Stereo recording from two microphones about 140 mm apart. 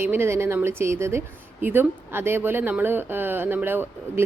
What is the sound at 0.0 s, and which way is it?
A woman's voice, 15° right (ahead or behind).